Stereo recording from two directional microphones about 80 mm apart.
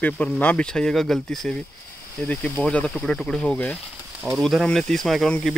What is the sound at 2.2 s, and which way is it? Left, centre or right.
Speech, left.